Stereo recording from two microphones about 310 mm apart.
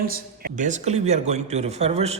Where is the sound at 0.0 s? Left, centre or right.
Right.